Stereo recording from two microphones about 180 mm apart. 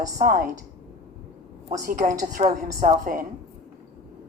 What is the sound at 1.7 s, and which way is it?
A woman's voice, 50° right (ahead or behind).